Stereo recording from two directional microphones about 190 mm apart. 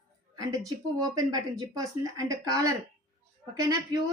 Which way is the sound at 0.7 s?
20° right (ahead or behind).